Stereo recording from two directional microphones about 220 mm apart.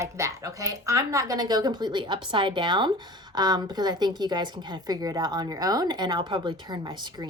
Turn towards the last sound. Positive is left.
turn(degrees=-20)  # may be behind; listen again after turning